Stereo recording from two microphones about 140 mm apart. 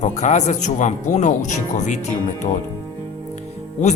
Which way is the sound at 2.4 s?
40° left (ahead or behind).